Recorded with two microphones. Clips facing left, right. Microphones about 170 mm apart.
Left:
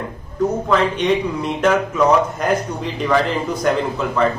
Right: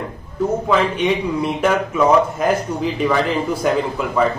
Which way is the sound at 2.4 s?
5° right (ahead or behind).